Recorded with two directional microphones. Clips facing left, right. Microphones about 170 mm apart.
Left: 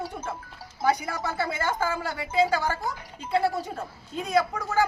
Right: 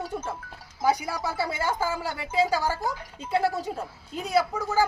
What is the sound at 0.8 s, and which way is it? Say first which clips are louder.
Speech: even; 10° right (ahead or behind).